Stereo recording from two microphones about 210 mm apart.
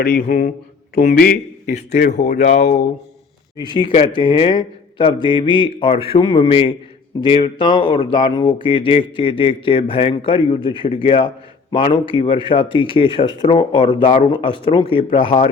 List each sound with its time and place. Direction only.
0.0 s a man's voice: 50° left (ahead or behind)
3.6 s speech: 20° left (ahead or behind)